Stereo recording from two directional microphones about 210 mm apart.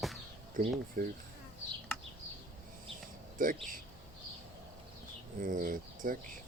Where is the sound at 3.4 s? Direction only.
40° right (ahead or behind).